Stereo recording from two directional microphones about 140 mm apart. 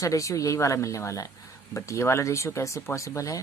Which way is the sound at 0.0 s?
25° left (ahead or behind).